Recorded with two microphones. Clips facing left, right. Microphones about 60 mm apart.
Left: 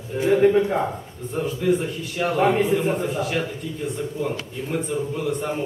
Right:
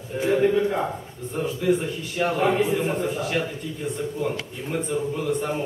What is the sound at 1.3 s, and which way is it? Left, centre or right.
A man's voice, centre.